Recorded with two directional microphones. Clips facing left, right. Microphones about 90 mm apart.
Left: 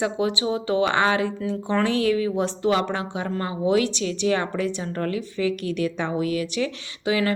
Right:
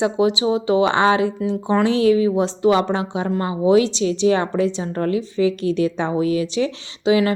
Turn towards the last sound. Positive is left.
turn(degrees=-20)  # may be behind; listen again after turning